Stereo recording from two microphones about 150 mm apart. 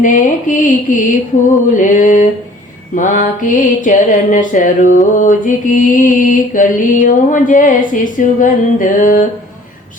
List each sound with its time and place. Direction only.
0.0 s mantra: 60° left (ahead or behind)